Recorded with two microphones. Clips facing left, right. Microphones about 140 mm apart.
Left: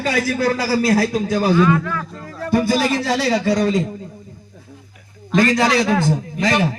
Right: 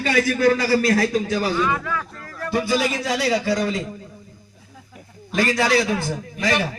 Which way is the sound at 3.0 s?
30° left (ahead or behind).